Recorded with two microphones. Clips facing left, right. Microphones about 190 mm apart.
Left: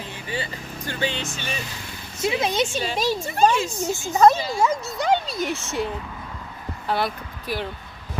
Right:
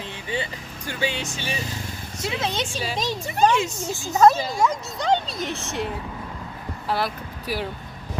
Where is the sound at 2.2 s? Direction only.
10° left (ahead or behind); by 7.7 s 5° right (ahead or behind).